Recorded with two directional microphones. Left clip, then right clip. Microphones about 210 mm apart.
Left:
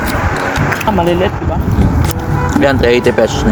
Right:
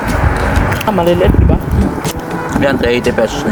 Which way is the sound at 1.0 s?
45° right (ahead or behind).